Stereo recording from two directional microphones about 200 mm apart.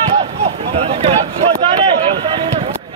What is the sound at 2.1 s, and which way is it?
Run, 25° right (ahead or behind).